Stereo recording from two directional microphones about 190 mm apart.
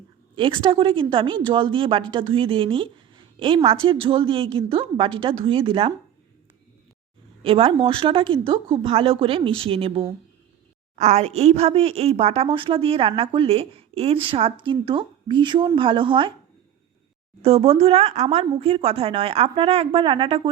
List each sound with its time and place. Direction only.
0.3 s a woman's voice: 25° right (ahead or behind)
7.4 s a woman's voice: 30° right (ahead or behind)
17.4 s a woman's voice: 35° right (ahead or behind)